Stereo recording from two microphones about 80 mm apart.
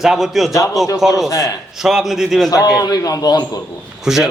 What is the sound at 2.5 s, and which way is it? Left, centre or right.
Speech, left.